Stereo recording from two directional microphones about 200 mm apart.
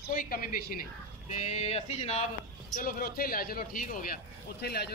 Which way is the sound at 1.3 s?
35° left (ahead or behind).